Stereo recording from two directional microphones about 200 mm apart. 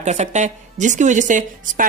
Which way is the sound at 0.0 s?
35° right (ahead or behind).